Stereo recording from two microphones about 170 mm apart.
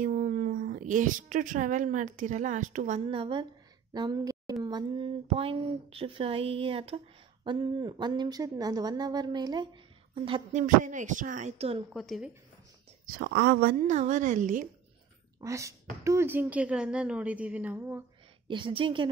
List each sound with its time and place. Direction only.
0.0 s speech: 50° right (ahead or behind)
3.1 s speech: 30° right (ahead or behind)
10.8 s speech: 45° right (ahead or behind)
11.9 s speech: centre (ahead or behind)
13.0 s speech: 65° right (ahead or behind)
13.8 s speech: 45° right (ahead or behind)
15.4 s a woman's voice: 20° right (ahead or behind)
18.5 s speech: 30° right (ahead or behind)